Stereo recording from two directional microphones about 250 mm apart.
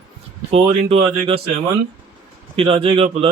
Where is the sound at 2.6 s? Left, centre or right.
Right.